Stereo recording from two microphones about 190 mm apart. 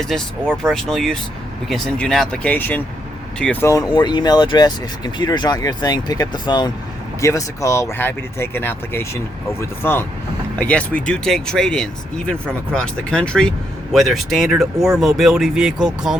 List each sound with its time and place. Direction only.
0.1 s speech: centre (ahead or behind)